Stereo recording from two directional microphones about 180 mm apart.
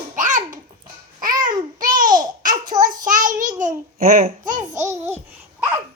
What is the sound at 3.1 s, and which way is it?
Child singing, 45° right (ahead or behind).